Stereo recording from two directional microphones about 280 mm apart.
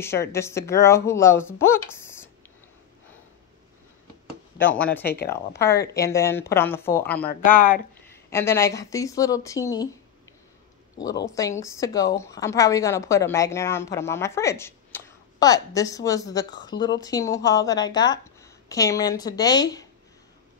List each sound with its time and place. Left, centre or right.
0.0 s a woman's voice: centre
4.6 s a woman's voice: centre
7.2 s speech: left
8.1 s a woman's voice: centre
11.0 s a woman's voice: centre